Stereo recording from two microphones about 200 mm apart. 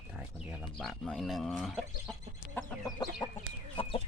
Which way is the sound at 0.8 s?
Centre (ahead or behind).